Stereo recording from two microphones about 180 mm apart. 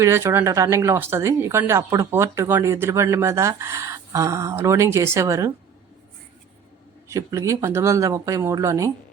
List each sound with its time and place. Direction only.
0.0 s speech: 15° right (ahead or behind)
7.1 s speech: 15° right (ahead or behind)